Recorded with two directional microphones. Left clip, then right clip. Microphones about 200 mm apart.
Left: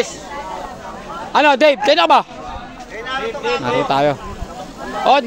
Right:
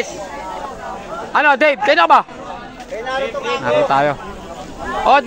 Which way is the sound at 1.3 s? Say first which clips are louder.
Left 1 dB; 30° left (ahead or behind).